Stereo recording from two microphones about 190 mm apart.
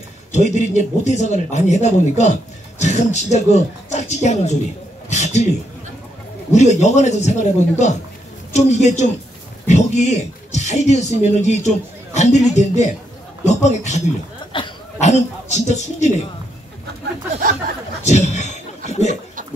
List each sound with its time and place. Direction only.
0.3 s speech: 40° left (ahead or behind)
6.5 s speech: 35° left (ahead or behind)
14.5 s speech: 25° left (ahead or behind)
15.0 s speech: 35° left (ahead or behind)
18.0 s a sound: 40° left (ahead or behind)